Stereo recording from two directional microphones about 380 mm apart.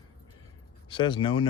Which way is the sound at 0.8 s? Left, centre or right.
Centre.